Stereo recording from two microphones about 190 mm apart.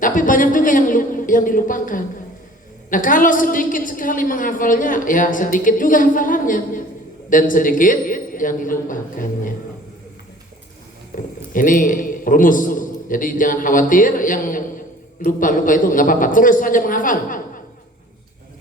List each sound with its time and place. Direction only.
0.0 s a woman's voice: 45° left (ahead or behind)
11.1 s a woman's voice: 45° left (ahead or behind)